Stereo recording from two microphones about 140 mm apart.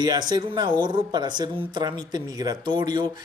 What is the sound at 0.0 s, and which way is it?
Speech, 30° right (ahead or behind).